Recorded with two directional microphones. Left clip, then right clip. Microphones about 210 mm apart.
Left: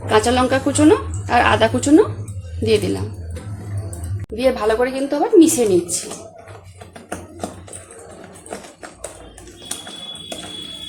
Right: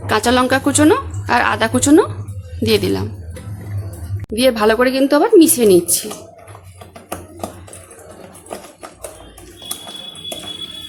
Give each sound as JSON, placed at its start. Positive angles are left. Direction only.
{"t": 0.1, "sound": "a woman's voice", "side_deg": -25}
{"t": 4.4, "sound": "speech", "side_deg": -45}